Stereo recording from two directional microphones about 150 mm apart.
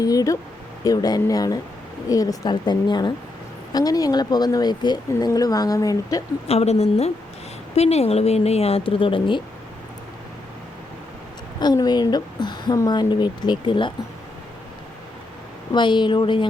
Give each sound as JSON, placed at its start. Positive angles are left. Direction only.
{"t": 0.0, "sound": "speech", "side_deg": 25}
{"t": 6.5, "sound": "speech", "side_deg": 45}
{"t": 11.6, "sound": "speech", "side_deg": 25}
{"t": 15.7, "sound": "speech", "side_deg": 30}